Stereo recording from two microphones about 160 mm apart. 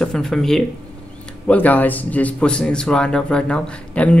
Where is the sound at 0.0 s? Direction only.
5° left (ahead or behind).